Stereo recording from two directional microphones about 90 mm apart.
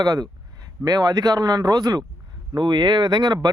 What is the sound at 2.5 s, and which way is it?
Speech, 60° right (ahead or behind).